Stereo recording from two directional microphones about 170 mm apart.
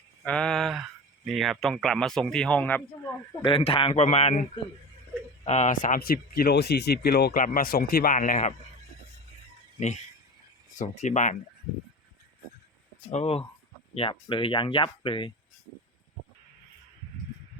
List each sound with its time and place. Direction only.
0.2 s speech: 5° left (ahead or behind)
3.4 s a man's voice: 30° left (ahead or behind)
5.5 s speech: 45° left (ahead or behind)
9.8 s speech: 45° left (ahead or behind)
13.1 s a man's voice: 40° left (ahead or behind)